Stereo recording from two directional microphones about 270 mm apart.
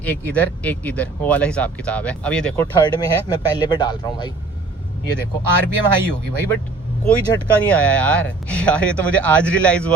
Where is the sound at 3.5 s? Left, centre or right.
Centre.